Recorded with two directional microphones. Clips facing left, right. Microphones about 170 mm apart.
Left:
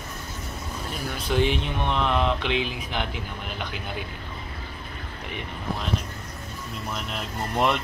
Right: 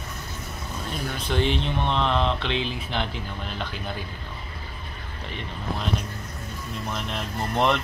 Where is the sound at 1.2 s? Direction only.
10° left (ahead or behind).